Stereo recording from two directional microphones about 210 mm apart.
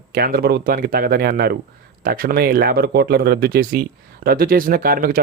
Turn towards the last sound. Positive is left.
turn(degrees=-45)  # may be behind; listen again after turning